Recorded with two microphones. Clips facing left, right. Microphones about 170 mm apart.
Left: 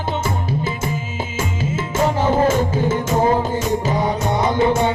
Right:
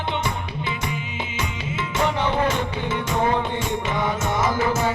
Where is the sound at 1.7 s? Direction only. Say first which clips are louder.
Left 4 dB; 45° left (ahead or behind).